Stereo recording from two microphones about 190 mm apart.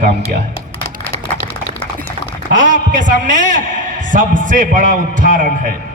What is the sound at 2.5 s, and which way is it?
A man's voice, 45° right (ahead or behind).